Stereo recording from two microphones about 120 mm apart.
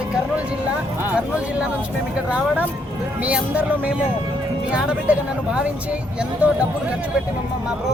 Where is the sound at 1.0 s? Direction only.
10° right (ahead or behind).